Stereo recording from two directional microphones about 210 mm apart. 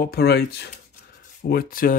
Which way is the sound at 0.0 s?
50° left (ahead or behind).